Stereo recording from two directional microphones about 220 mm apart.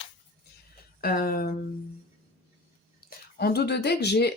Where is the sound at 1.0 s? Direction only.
45° left (ahead or behind).